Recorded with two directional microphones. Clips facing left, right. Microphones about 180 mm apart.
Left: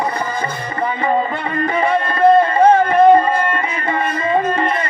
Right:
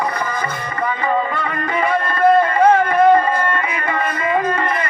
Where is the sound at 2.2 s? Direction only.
25° left (ahead or behind).